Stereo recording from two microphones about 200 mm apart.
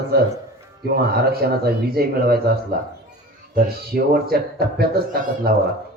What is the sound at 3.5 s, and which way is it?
A man's voice, 50° right (ahead or behind).